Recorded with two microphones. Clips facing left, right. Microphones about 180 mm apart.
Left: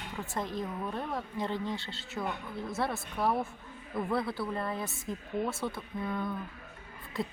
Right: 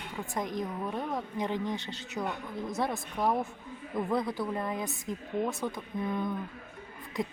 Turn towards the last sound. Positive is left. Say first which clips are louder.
# right 2 dB
turn(degrees=-15)  # may be behind; listen again after turning